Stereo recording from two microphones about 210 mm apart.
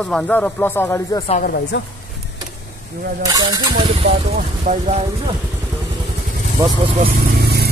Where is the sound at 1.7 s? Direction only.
60° left (ahead or behind).